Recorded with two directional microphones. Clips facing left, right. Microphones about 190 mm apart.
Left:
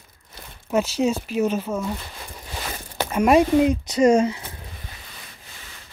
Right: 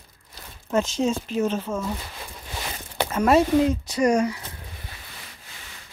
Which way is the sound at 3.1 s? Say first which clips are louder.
Left 2 dB; 15° left (ahead or behind).